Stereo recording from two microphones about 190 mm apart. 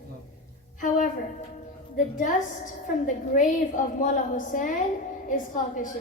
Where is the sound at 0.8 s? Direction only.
40° left (ahead or behind).